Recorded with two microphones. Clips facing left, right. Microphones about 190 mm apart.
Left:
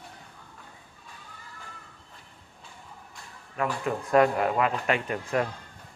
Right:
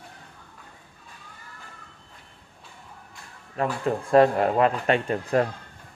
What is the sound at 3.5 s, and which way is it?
Speech, 30° right (ahead or behind).